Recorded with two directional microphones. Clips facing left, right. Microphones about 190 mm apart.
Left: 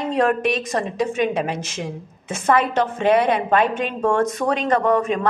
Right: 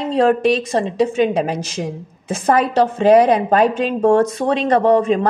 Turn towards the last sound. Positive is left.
turn(degrees=-30)  # may be behind; listen again after turning